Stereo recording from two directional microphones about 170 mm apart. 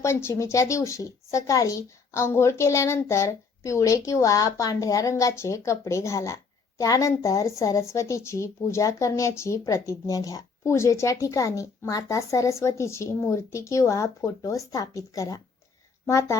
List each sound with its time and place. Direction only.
0.0 s speech: 15° left (ahead or behind)